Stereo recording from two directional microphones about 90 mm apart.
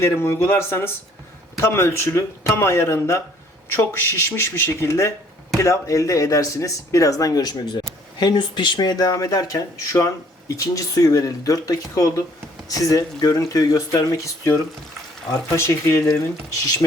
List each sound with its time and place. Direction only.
0.0 s speech: 30° left (ahead or behind)